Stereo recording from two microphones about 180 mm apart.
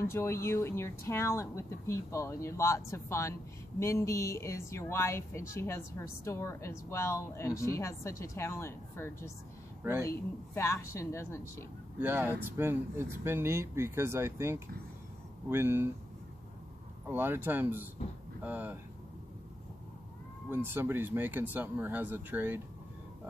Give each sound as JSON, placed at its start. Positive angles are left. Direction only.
{"t": 0.0, "sound": "speech", "side_deg": 15}
{"t": 12.0, "sound": "speech", "side_deg": -10}
{"t": 17.1, "sound": "speech", "side_deg": -10}
{"t": 20.4, "sound": "speech", "side_deg": -15}